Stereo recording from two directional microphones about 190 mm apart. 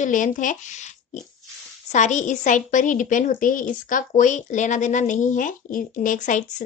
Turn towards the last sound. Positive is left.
turn(degrees=45)  # may be behind; listen again after turning